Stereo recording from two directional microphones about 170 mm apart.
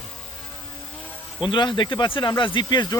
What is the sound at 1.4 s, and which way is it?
Speech, 30° left (ahead or behind).